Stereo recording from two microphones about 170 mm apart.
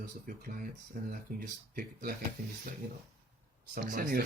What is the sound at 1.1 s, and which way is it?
Speech, 60° right (ahead or behind).